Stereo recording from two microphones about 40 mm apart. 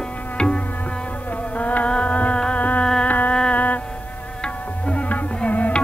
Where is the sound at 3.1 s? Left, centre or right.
Left.